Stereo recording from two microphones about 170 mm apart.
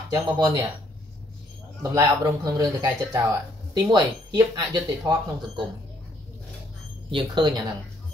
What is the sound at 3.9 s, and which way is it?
Speech, 20° right (ahead or behind).